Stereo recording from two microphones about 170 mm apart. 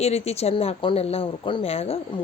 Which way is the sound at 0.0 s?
40° left (ahead or behind).